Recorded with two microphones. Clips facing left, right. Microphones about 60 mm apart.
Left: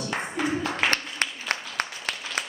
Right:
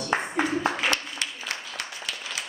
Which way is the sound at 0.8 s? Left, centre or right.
Left.